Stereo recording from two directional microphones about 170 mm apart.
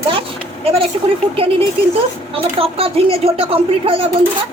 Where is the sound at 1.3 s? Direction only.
35° right (ahead or behind).